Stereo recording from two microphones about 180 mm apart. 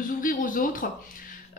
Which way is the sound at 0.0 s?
50° left (ahead or behind).